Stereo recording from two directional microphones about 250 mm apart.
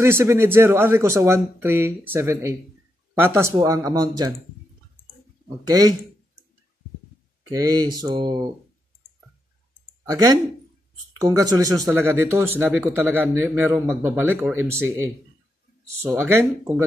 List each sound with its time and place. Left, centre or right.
0.0 s speech: centre
5.7 s speech: centre
7.5 s speech: centre
10.0 s speech: centre
16.0 s speech: centre